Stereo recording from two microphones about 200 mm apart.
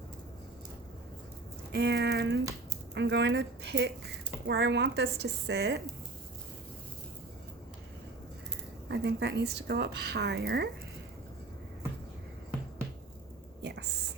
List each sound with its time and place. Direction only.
1.7 s speech: 55° right (ahead or behind)
8.9 s speech: 55° right (ahead or behind)
13.6 s whispering: 55° right (ahead or behind)